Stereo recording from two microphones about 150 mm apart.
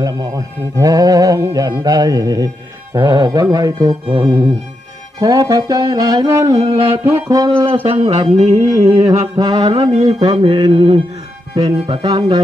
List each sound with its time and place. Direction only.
0.0 s speech: 25° right (ahead or behind)
7.6 s a sound: 40° right (ahead or behind)
9.3 s mantra: 25° right (ahead or behind)
11.5 s speech: 25° right (ahead or behind)
11.8 s mantra: 30° right (ahead or behind)